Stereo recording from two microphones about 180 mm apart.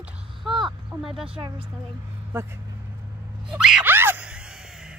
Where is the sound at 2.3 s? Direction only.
15° right (ahead or behind).